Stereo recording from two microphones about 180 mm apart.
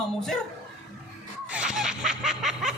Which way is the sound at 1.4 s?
5° right (ahead or behind).